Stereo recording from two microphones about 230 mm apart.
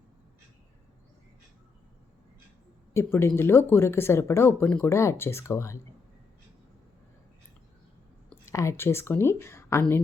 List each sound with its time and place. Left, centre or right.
2.9 s speech: centre
8.3 s speech: centre